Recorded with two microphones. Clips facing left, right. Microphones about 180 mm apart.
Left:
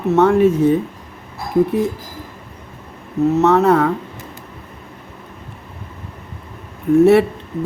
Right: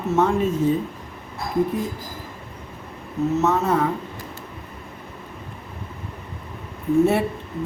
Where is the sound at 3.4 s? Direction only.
70° left (ahead or behind).